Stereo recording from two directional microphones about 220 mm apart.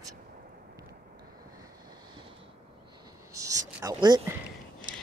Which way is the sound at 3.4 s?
15° right (ahead or behind).